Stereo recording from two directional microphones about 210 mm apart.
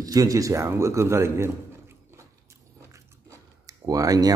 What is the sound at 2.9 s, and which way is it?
Chewing, 15° right (ahead or behind).